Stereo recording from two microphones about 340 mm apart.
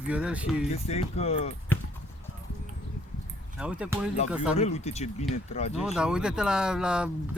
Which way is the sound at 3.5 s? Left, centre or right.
Centre.